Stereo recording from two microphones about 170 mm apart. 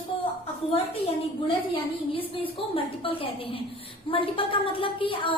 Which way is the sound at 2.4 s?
35° left (ahead or behind).